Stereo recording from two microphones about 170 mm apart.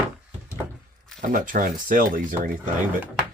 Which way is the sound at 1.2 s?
55° right (ahead or behind).